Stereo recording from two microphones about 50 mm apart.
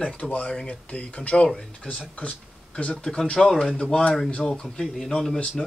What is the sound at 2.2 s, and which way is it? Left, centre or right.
Speech, left.